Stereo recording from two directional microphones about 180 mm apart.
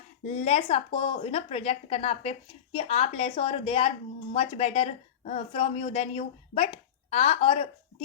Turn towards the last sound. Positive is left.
turn(degrees=35)  # may be behind; listen again after turning